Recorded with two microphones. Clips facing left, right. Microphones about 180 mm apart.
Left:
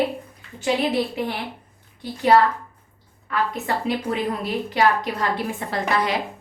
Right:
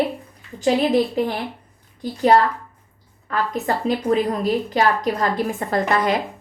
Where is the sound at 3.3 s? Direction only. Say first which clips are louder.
Right 2 dB; 35° right (ahead or behind).